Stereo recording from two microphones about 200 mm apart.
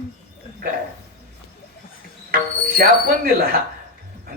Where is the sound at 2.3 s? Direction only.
50° right (ahead or behind).